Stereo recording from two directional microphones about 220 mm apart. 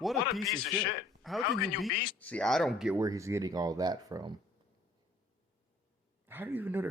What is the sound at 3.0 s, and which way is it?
Speech, 15° right (ahead or behind).